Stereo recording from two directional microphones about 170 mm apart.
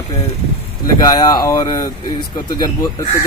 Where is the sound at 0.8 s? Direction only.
20° left (ahead or behind).